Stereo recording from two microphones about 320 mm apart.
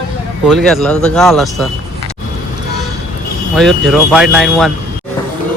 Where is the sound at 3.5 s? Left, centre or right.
Centre.